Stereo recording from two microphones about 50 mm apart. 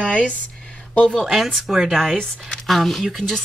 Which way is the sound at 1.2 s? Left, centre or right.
Centre.